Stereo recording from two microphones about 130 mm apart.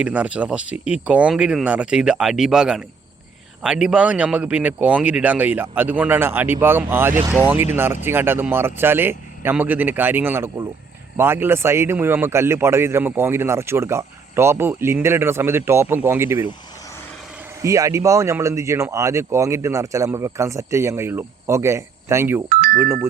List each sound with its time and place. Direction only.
0.0 s speech: 10° right (ahead or behind)
17.6 s speech: 25° right (ahead or behind)
22.4 s music: 90° right